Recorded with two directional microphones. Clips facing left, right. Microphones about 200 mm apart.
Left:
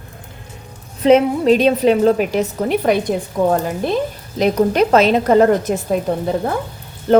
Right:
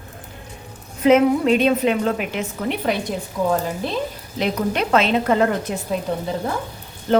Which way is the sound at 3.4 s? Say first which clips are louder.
Left 5 dB; 55° left (ahead or behind).